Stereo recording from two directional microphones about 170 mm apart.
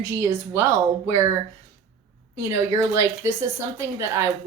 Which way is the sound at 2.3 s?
15° right (ahead or behind).